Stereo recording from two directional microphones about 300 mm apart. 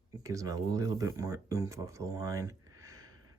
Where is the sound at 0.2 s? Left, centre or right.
Centre.